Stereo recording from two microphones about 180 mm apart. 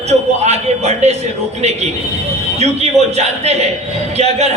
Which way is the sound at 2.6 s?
35° right (ahead or behind).